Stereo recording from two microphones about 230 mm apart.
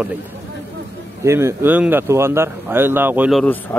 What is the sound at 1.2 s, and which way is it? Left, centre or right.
Speech, centre.